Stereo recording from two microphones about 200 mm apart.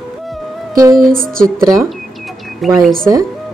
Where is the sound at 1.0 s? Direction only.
Centre (ahead or behind).